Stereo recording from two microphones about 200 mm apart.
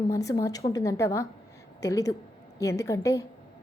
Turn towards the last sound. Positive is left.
turn(degrees=15)  # may be behind; listen again after turning